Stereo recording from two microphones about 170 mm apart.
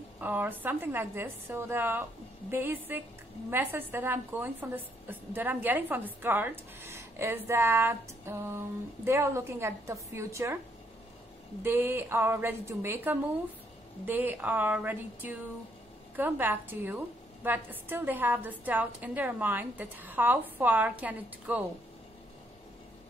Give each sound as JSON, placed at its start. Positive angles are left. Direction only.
{"t": 0.2, "sound": "a woman's voice", "side_deg": -10}
{"t": 11.6, "sound": "a woman's voice", "side_deg": -10}